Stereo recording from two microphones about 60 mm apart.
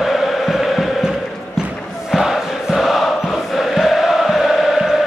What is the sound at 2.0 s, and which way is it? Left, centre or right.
Choir, centre.